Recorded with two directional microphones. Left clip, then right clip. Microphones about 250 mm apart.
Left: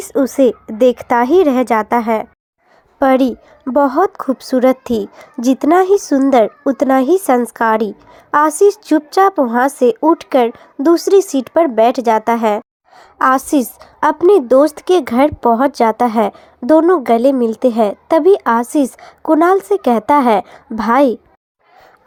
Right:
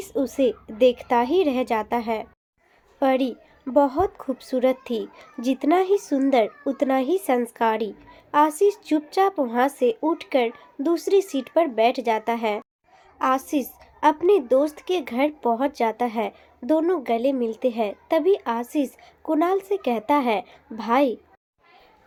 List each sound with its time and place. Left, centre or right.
0.0 s a child's voice: left